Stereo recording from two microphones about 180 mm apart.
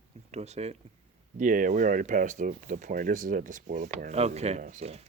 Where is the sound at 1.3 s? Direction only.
50° right (ahead or behind).